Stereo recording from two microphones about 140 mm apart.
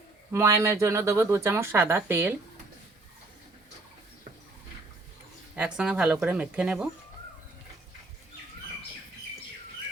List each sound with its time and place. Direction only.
0.3 s speech: 20° right (ahead or behind)
5.5 s speech: 5° right (ahead or behind)